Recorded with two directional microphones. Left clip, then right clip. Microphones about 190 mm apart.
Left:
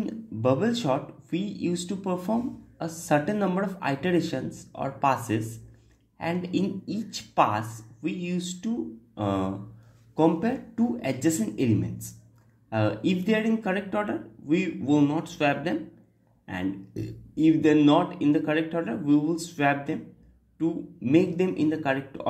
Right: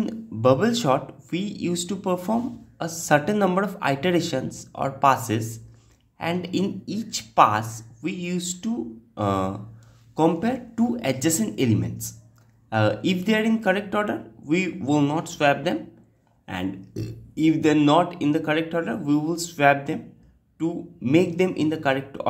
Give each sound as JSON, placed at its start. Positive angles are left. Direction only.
{"t": 0.0, "sound": "speech", "side_deg": -15}